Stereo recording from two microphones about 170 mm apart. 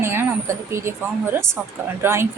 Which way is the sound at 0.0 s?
15° right (ahead or behind).